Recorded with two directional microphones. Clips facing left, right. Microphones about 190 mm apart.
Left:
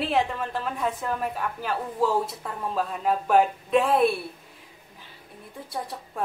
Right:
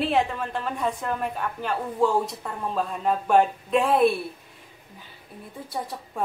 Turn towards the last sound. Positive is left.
turn(degrees=0)  # may be behind; listen again after turning